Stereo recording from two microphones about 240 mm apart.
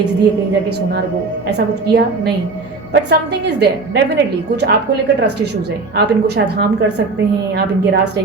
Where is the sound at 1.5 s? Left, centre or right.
Right.